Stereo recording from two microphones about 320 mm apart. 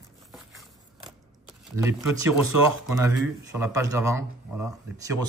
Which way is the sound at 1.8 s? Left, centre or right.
Centre.